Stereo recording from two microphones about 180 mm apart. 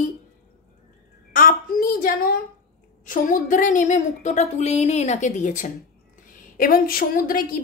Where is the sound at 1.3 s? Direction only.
50° left (ahead or behind).